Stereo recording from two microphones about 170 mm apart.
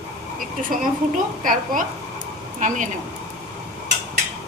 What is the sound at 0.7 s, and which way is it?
A woman's voice, 55° right (ahead or behind).